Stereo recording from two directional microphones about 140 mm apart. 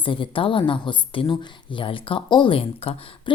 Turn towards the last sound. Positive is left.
turn(degrees=40)  # may be behind; listen again after turning